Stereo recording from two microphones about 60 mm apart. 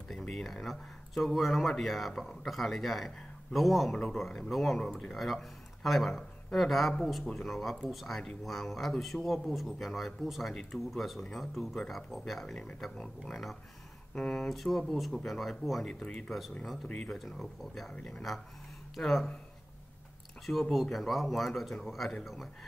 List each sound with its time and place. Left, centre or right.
0.3 s speech: centre
10.5 s speech: centre
10.9 s speech: centre
14.1 s speech: centre
14.5 s speech: centre
15.9 s speech: centre
17.2 s speech: centre
20.7 s speech: centre